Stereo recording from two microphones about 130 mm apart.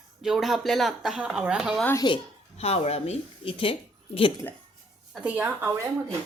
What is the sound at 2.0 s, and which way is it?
Speech, 35° left (ahead or behind).